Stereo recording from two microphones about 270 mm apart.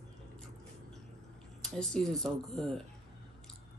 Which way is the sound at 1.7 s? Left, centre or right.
Centre.